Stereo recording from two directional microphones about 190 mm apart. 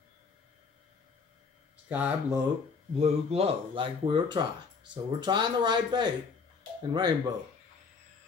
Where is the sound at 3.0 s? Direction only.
30° right (ahead or behind).